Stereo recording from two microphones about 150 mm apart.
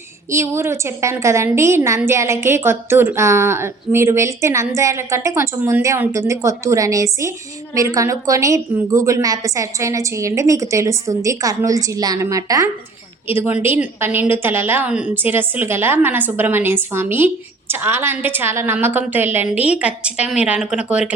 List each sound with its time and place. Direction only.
0.3 s a woman's voice: 20° right (ahead or behind)